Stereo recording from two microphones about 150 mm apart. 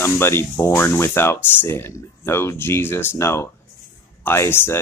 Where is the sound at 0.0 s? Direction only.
15° left (ahead or behind).